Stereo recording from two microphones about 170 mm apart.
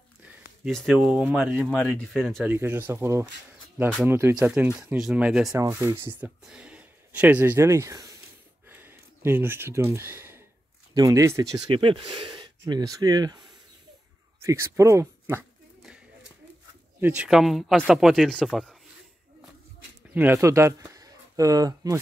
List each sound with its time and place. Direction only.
0.7 s speech: centre (ahead or behind)
2.0 s speech: 5° left (ahead or behind)
2.4 s speech: 10° right (ahead or behind)
5.5 s speech: 15° right (ahead or behind)
8.6 s a sound: 10° right (ahead or behind)
11.0 s speech: 20° right (ahead or behind)
11.7 s speech: 30° right (ahead or behind); by 15.4 s 15° right (ahead or behind)
15.8 s a sound: 5° right (ahead or behind)
17.0 s speech: 10° right (ahead or behind)
20.2 s speech: 15° right (ahead or behind)